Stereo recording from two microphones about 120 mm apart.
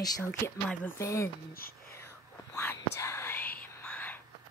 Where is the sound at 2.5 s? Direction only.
20° left (ahead or behind).